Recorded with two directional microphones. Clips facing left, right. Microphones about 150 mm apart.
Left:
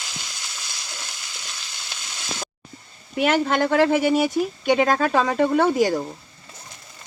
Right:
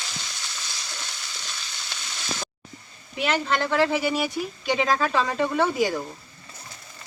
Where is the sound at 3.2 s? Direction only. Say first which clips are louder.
Left 5 dB; 50° left (ahead or behind).